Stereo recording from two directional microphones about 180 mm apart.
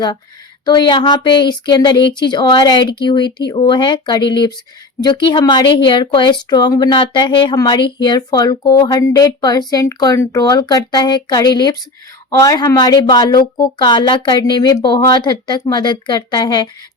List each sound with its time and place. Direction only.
0.6 s a woman's voice: 25° left (ahead or behind)